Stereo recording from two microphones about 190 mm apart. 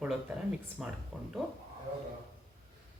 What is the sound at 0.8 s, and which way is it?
Speech, 5° right (ahead or behind).